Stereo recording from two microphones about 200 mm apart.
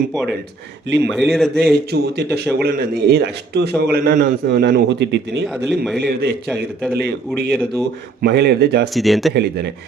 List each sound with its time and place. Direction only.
1.1 s a man's voice: centre (ahead or behind)
1.9 s speech: 55° right (ahead or behind)
5.6 s a man's voice: centre (ahead or behind)
6.0 s speech: 50° right (ahead or behind)
8.2 s speech: 50° right (ahead or behind)
9.0 s a man's voice: centre (ahead or behind)